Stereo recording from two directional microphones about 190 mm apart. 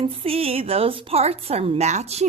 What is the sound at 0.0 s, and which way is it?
A woman's voice, 30° right (ahead or behind).